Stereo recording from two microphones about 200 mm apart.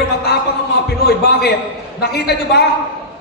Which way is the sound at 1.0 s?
55° left (ahead or behind).